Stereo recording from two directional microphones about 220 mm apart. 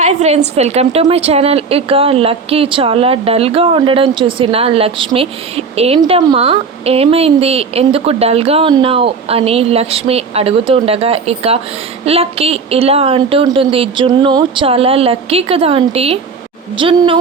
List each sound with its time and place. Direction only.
0.0 s a woman's voice: 30° right (ahead or behind)